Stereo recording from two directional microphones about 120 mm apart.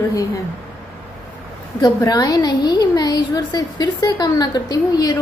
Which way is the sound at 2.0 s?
30° left (ahead or behind).